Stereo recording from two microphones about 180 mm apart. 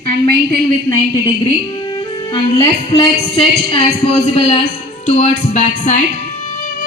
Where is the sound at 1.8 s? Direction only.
25° left (ahead or behind).